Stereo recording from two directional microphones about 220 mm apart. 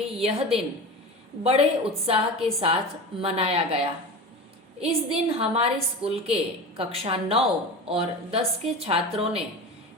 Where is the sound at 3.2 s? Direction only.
25° right (ahead or behind).